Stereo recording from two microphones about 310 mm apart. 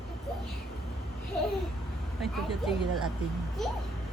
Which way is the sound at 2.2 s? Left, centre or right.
Centre.